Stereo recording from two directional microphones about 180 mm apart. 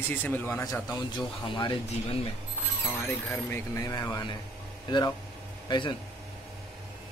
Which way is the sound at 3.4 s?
15° left (ahead or behind).